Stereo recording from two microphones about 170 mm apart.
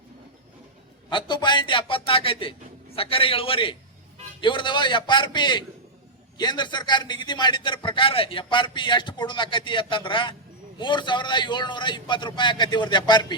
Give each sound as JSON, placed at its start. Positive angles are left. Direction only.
{"t": 1.1, "sound": "a man's voice", "side_deg": 25}